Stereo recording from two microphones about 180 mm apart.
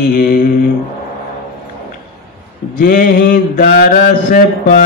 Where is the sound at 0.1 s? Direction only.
55° left (ahead or behind).